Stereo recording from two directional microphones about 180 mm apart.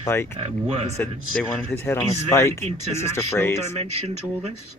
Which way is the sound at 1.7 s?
15° left (ahead or behind).